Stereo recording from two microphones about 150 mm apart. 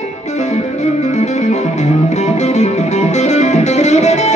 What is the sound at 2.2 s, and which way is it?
Music, 50° left (ahead or behind).